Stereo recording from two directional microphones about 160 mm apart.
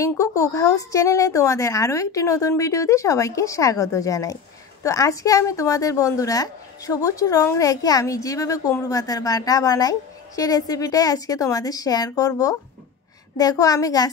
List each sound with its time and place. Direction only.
0.0 s a woman's voice: 20° left (ahead or behind)